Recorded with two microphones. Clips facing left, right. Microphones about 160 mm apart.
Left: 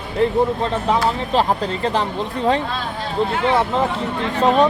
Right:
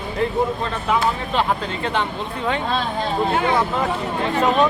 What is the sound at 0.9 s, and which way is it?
Speech, 35° left (ahead or behind).